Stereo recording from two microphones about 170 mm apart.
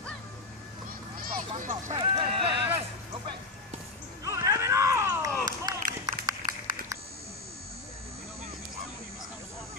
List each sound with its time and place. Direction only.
1.6 s speech: 45° right (ahead or behind)
2.0 s a sound: 35° right (ahead or behind)
4.2 s run: 20° right (ahead or behind)